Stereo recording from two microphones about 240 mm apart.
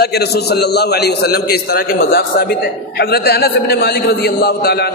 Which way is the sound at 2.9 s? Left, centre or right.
Left.